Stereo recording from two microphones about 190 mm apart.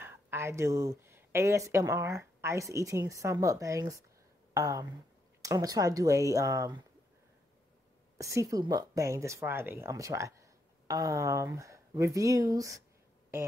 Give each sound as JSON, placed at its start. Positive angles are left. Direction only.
{"t": 0.0, "sound": "speech", "side_deg": -15}
{"t": 8.2, "sound": "speech", "side_deg": -15}